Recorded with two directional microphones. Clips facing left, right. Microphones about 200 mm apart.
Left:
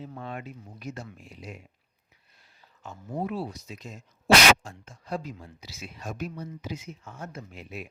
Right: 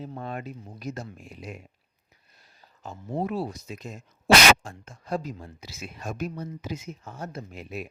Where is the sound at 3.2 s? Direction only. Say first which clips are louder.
Right 2 dB; 45° right (ahead or behind).